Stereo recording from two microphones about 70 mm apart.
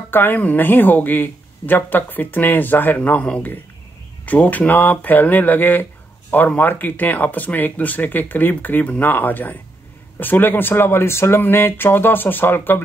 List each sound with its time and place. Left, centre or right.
0.1 s speech: left